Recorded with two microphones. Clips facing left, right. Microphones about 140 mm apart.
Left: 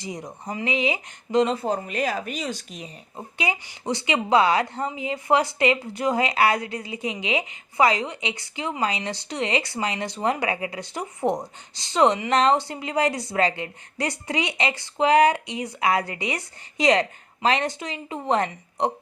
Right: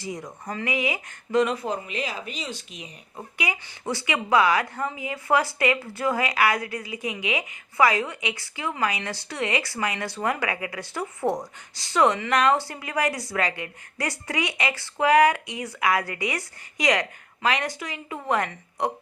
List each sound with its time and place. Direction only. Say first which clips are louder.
0.0 s speech: even; 20° left (ahead or behind); by 2.9 s 40° left (ahead or behind)
3.2 s speech: left 3 dB; 25° left (ahead or behind)